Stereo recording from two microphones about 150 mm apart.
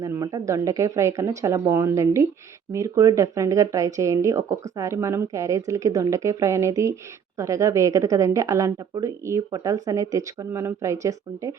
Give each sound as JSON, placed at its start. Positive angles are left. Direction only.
{"t": 0.0, "sound": "speech", "side_deg": -25}